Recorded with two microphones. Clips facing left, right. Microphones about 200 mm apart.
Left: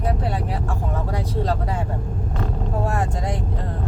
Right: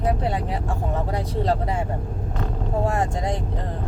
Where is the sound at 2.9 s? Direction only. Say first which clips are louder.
Right 1 dB; 25° right (ahead or behind).